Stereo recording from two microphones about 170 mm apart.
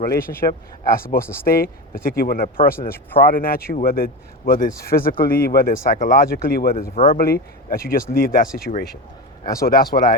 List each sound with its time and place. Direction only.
0.1 s speech: 15° left (ahead or behind)
0.9 s speech: 60° left (ahead or behind)
2.9 s speech: 10° left (ahead or behind)
3.3 s speech: 60° left (ahead or behind)
6.9 s speech: 35° left (ahead or behind)
7.2 s speech: 65° left (ahead or behind)